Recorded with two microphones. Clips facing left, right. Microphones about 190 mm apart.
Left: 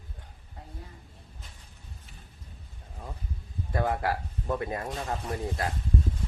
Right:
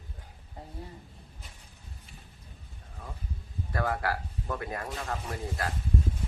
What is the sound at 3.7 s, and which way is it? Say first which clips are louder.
Speech: left 2 dB; 20° left (ahead or behind).